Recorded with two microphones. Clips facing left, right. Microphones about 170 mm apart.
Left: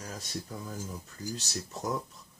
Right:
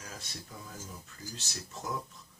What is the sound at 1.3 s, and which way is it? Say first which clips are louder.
Speech: left 6 dB; 40° left (ahead or behind).